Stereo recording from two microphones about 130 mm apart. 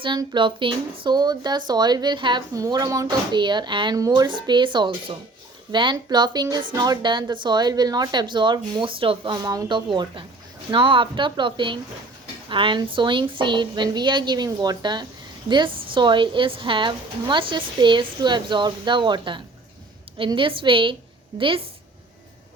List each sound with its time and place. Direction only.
0.0 s a woman's voice: 35° right (ahead or behind)
9.4 s a woman's voice: 30° right (ahead or behind)